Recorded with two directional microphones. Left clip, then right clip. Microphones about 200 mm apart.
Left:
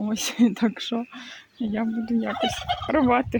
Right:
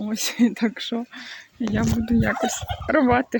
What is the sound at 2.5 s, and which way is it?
Fowl, 50° left (ahead or behind).